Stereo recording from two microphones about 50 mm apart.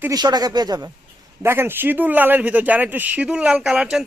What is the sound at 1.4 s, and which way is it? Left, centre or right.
Speech, right.